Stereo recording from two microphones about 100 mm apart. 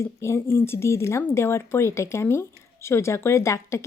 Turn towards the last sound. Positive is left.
turn(degrees=30)  # may be behind; listen again after turning